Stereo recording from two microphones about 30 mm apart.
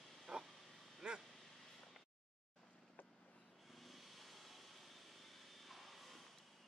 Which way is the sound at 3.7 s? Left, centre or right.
Centre.